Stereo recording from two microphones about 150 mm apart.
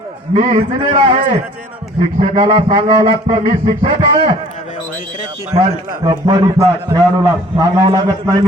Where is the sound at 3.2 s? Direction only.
50° right (ahead or behind).